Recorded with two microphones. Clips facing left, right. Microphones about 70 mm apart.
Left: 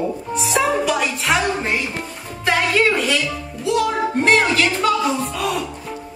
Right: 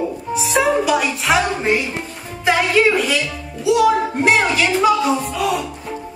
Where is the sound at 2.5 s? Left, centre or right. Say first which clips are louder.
Right 2 dB; centre.